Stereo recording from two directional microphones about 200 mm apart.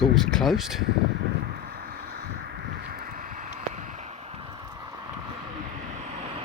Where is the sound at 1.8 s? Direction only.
45° right (ahead or behind).